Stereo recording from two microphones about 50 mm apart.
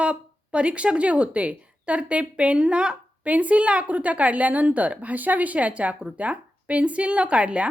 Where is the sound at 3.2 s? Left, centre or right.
Right.